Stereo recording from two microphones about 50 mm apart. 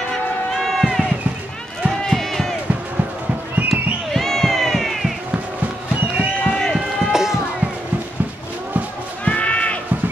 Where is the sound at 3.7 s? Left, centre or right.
Centre.